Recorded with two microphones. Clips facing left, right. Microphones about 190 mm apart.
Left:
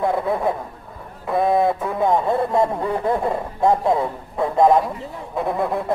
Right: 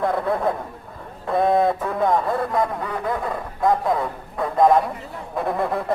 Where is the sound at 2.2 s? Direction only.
30° left (ahead or behind).